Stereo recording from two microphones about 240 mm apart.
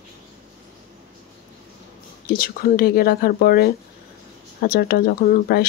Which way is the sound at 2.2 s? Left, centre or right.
Left.